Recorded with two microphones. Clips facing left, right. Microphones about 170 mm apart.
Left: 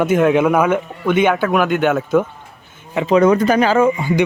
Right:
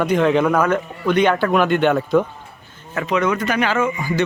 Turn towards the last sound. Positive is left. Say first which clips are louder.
# left 6 dB
turn(degrees=30)  # may be behind; listen again after turning